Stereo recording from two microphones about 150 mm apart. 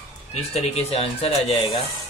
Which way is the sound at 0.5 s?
40° left (ahead or behind).